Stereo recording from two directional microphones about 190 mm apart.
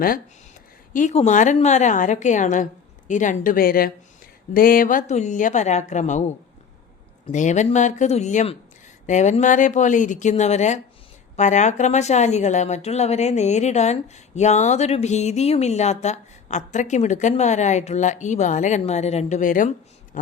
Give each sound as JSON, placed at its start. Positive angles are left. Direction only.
{"t": 0.9, "sound": "a woman's voice", "side_deg": 40}